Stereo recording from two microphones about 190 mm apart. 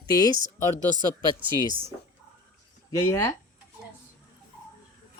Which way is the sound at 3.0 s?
15° left (ahead or behind).